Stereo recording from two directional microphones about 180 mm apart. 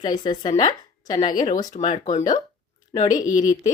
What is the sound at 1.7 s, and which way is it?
Speech, 40° left (ahead or behind).